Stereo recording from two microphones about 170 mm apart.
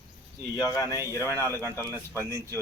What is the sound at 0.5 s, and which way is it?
Speech, 20° left (ahead or behind).